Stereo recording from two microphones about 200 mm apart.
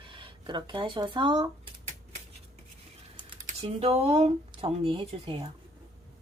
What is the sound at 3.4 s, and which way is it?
Speech, 30° right (ahead or behind).